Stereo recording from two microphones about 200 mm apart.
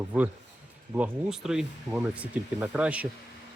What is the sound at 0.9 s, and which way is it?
Speech, 5° right (ahead or behind).